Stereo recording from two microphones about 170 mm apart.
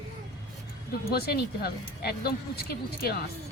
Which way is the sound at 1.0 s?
65° left (ahead or behind).